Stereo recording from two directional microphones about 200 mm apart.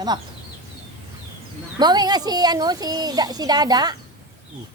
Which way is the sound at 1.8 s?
20° right (ahead or behind).